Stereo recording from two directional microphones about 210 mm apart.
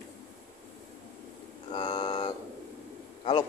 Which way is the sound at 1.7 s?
25° left (ahead or behind).